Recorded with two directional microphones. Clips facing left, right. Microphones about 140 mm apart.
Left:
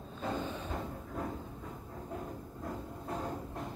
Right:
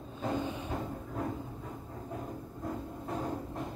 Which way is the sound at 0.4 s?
10° right (ahead or behind).